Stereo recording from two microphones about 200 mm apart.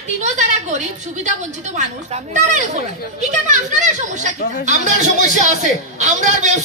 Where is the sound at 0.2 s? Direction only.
35° right (ahead or behind).